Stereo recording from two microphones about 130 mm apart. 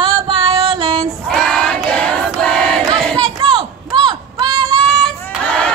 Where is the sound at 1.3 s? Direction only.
5° left (ahead or behind).